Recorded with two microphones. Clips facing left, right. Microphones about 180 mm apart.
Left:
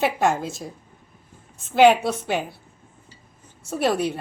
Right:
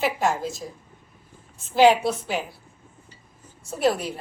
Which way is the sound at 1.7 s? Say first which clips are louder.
Left 1 dB; 60° left (ahead or behind).